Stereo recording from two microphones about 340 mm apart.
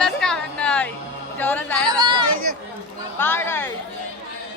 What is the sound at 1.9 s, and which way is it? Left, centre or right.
Chatter, centre.